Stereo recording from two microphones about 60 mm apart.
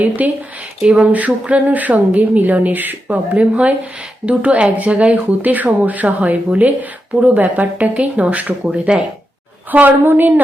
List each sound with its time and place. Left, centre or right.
0.2 s a woman's voice: right
9.7 s a woman's voice: right